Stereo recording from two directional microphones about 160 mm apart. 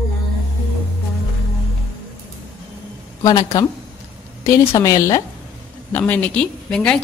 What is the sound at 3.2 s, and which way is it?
Speech, 25° left (ahead or behind).